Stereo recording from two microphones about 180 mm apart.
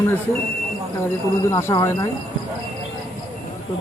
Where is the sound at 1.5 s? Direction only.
15° left (ahead or behind).